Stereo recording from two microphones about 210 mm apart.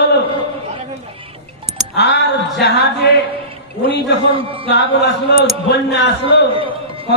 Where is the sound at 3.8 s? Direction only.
25° right (ahead or behind).